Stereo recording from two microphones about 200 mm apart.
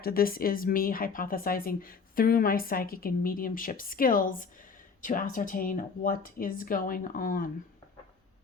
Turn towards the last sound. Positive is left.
turn(degrees=45)  # may be behind; listen again after turning